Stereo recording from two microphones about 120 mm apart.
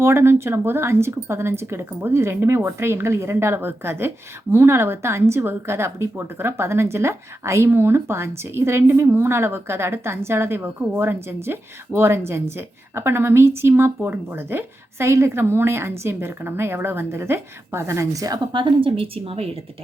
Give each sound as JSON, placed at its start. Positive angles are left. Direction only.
{"t": 0.0, "sound": "speech", "side_deg": -20}
{"t": 18.5, "sound": "speech", "side_deg": -45}